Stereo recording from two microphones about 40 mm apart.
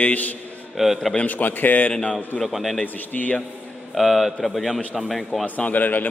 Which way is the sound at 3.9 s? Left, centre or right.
Centre.